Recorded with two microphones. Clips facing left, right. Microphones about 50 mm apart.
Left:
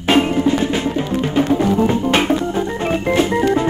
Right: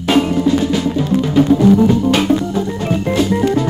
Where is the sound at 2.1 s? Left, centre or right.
Left.